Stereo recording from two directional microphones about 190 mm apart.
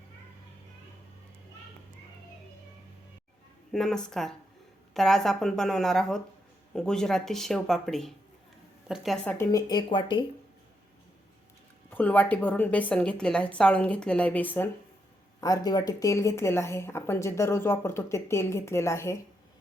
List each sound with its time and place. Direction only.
3.7 s speech: centre (ahead or behind)
9.4 s speech: 20° left (ahead or behind)
11.9 s a woman's voice: 10° left (ahead or behind)
15.4 s a woman's voice: 20° left (ahead or behind)